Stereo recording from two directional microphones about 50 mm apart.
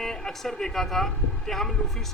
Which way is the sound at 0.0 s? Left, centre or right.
Centre.